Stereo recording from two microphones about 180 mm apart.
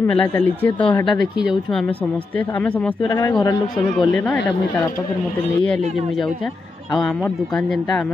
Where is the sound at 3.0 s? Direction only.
20° left (ahead or behind).